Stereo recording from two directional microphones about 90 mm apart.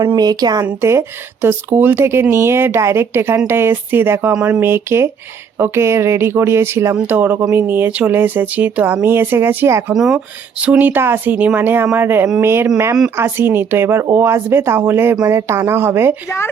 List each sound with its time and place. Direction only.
0.2 s speech: 50° right (ahead or behind)
0.6 s a woman's voice: 30° right (ahead or behind)
4.6 s a woman's voice: 25° right (ahead or behind)
9.9 s speech: 5° right (ahead or behind)
10.6 s a woman's voice: 15° right (ahead or behind)
15.1 s a woman's voice: 35° right (ahead or behind)